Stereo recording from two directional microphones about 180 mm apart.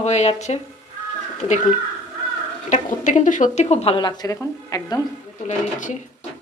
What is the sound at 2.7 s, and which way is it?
Speech, 45° left (ahead or behind).